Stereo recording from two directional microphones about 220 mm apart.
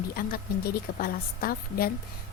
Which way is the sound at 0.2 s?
40° left (ahead or behind).